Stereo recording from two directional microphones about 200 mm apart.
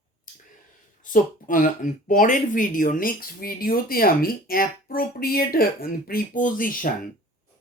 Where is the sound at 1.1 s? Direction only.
45° left (ahead or behind).